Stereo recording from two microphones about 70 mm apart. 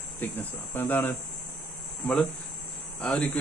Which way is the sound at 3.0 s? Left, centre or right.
Centre.